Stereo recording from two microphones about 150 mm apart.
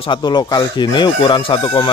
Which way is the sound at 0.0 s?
30° left (ahead or behind).